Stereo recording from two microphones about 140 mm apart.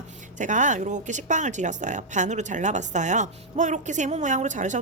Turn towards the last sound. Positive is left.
turn(degrees=-60)  # may be behind; listen again after turning